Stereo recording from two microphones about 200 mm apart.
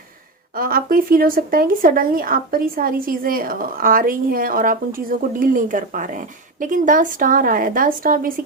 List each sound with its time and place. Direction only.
0.5 s speech: 45° right (ahead or behind)